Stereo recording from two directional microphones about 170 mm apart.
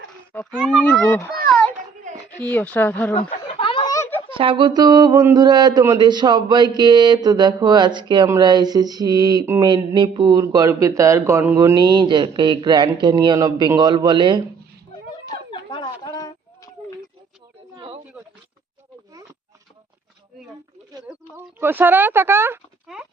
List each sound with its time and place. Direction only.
0.6 s speech: 5° left (ahead or behind)
2.4 s speech: 10° left (ahead or behind)
3.4 s a sound: 30° left (ahead or behind)
4.3 s mantra: 30° right (ahead or behind)
15.3 s a sound: 25° left (ahead or behind)
21.3 s speech: 10° right (ahead or behind)